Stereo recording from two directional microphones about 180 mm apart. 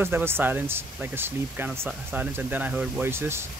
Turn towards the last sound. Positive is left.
turn(degrees=-15)  # may be behind; listen again after turning